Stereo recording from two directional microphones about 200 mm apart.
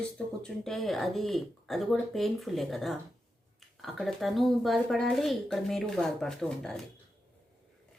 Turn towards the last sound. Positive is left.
turn(degrees=5)  # may be behind; listen again after turning